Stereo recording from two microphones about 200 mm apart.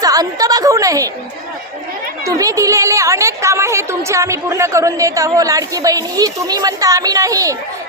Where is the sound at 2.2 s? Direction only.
15° right (ahead or behind).